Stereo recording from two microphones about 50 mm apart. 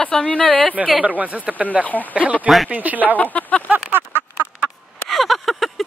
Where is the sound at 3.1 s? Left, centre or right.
Left.